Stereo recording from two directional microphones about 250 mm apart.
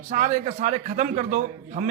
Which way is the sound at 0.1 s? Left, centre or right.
Right.